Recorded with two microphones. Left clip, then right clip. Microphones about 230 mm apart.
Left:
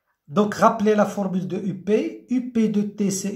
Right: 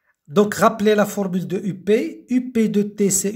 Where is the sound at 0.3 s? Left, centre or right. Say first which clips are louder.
Right 2 dB; right.